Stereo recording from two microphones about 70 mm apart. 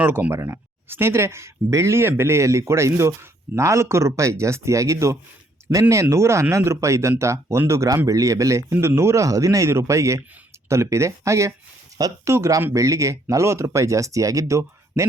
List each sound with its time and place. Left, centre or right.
0.0 s speech: right
0.3 s speech: right